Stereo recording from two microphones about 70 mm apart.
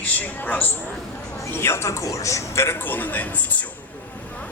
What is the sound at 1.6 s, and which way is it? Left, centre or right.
A man's voice, left.